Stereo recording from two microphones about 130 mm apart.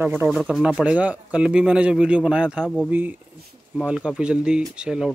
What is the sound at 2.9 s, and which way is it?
Speech, 15° right (ahead or behind).